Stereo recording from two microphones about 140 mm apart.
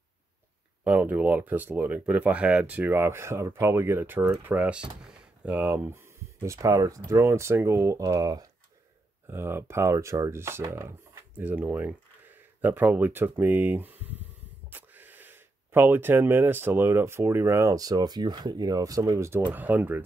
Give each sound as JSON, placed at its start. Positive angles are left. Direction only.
{"t": 0.8, "sound": "speech", "side_deg": -10}